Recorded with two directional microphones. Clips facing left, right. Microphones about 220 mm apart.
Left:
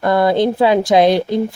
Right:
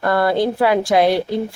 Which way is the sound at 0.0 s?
20° left (ahead or behind).